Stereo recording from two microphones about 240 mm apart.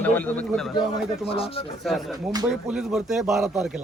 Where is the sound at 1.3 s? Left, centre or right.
Left.